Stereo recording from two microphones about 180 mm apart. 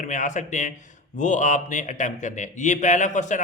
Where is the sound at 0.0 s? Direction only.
45° left (ahead or behind).